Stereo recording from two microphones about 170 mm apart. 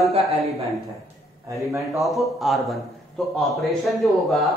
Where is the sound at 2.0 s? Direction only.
Centre (ahead or behind).